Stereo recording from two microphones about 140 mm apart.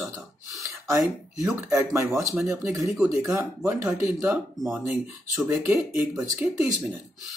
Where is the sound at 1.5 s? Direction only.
20° right (ahead or behind).